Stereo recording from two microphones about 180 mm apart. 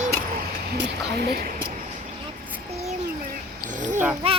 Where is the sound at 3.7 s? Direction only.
45° right (ahead or behind).